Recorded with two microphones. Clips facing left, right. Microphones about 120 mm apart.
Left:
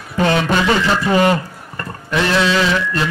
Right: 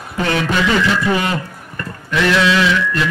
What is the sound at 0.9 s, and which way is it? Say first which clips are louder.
A man's voice: left 3 dB; 40° left (ahead or behind).